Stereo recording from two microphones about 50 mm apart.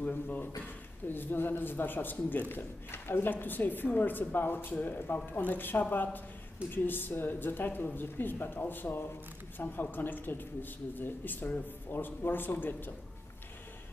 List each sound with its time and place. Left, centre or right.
0.0 s a man's voice: left